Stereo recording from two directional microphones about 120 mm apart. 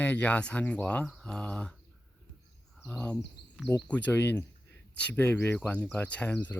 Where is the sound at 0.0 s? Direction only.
15° left (ahead or behind).